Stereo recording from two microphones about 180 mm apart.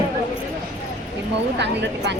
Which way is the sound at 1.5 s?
75° right (ahead or behind).